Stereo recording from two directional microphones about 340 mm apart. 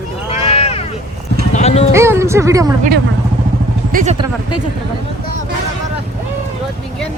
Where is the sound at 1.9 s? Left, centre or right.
Centre.